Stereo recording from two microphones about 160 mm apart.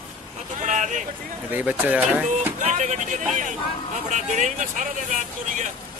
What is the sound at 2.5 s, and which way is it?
Speech, 50° right (ahead or behind).